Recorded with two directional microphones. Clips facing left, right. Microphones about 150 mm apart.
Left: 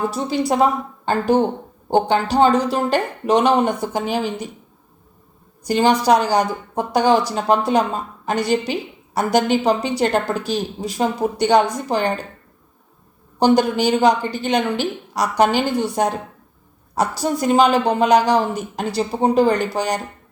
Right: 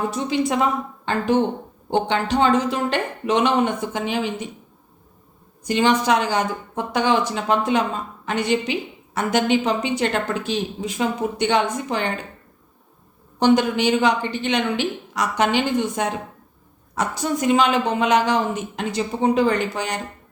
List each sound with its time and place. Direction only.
0.1 s a woman's voice: 35° left (ahead or behind)
5.6 s a woman's voice: 35° left (ahead or behind)
13.4 s a woman's voice: 35° left (ahead or behind)